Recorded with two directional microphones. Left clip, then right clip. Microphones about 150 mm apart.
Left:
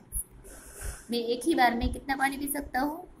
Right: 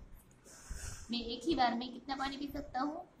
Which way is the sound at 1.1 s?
20° left (ahead or behind).